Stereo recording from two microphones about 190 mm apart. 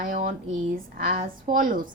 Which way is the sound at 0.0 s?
45° right (ahead or behind).